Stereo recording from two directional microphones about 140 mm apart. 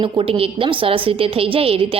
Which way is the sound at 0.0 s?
40° right (ahead or behind).